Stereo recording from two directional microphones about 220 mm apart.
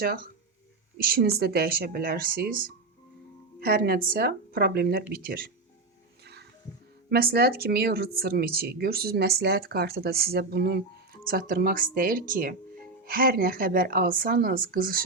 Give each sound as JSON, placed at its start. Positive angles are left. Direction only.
{"t": 0.9, "sound": "a woman's voice", "side_deg": -45}
{"t": 7.1, "sound": "a woman's voice", "side_deg": -45}